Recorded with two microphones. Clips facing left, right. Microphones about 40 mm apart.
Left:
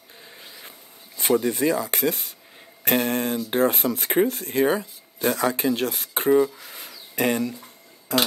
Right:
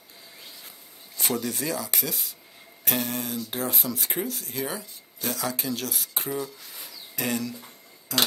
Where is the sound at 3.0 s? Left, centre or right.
Left.